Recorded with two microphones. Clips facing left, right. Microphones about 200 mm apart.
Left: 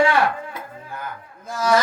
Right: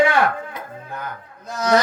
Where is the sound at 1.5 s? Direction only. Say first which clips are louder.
Right 1 dB; 20° right (ahead or behind).